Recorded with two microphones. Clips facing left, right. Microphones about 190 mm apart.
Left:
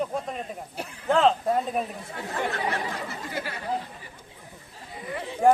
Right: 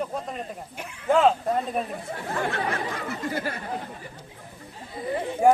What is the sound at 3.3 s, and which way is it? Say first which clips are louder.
Speech: right 4 dB; 45° right (ahead or behind).